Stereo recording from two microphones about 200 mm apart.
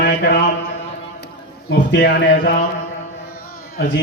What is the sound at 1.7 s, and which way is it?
Speech, 60° left (ahead or behind).